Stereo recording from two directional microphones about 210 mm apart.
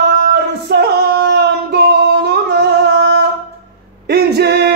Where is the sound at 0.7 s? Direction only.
50° right (ahead or behind).